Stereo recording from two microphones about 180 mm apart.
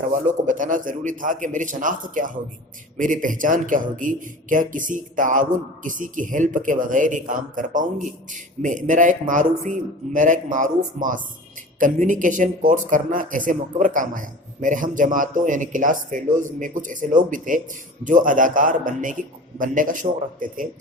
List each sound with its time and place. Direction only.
0.3 s a man's voice: 45° right (ahead or behind)